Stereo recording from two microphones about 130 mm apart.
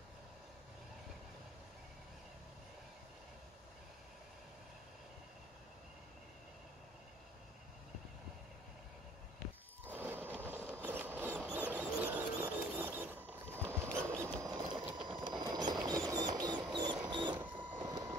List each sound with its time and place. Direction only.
9.8 s a sound: 15° right (ahead or behind); by 16.5 s 30° right (ahead or behind)
16.7 s music: 35° right (ahead or behind)
17.1 s printer: 35° right (ahead or behind)
17.5 s printer: 10° right (ahead or behind)